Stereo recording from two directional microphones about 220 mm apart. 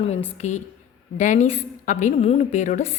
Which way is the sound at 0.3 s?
30° left (ahead or behind).